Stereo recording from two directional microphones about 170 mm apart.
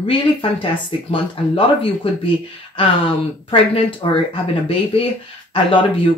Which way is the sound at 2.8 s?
30° left (ahead or behind).